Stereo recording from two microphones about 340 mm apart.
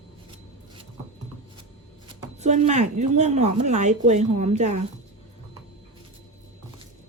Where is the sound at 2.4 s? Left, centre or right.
Centre.